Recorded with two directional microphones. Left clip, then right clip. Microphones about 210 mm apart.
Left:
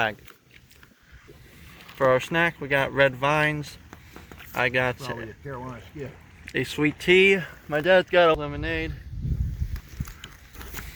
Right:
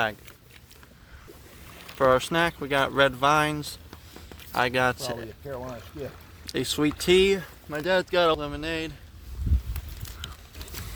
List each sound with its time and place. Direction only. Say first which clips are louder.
2.0 s speech: even; 15° right (ahead or behind)
6.4 s speech: left 1 dB; 15° right (ahead or behind)
7.3 s speech: left 6 dB; centre (ahead or behind); by 8.9 s 15° right (ahead or behind)